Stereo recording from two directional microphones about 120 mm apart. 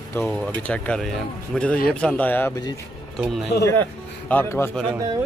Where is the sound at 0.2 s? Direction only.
20° left (ahead or behind).